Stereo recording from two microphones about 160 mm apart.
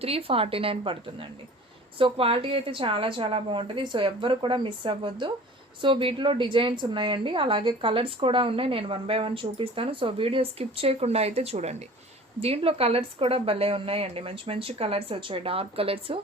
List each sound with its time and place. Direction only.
0.0 s a woman's voice: 35° right (ahead or behind)